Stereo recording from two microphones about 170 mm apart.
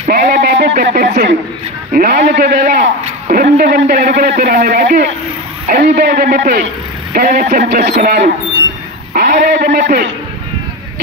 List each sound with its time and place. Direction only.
0.1 s a man's voice: 60° right (ahead or behind)